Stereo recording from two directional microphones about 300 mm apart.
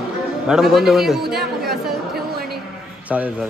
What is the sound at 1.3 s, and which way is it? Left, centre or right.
Chatter, centre.